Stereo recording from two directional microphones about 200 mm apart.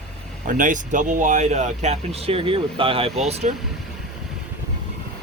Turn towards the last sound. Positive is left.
turn(degrees=-35)  # may be behind; listen again after turning